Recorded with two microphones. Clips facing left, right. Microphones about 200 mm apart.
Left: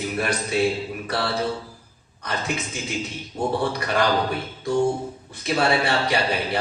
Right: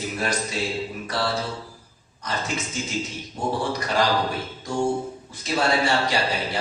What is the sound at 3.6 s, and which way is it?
Speech, 60° left (ahead or behind).